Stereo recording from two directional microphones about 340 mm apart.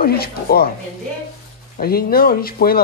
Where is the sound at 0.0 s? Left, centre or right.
Left.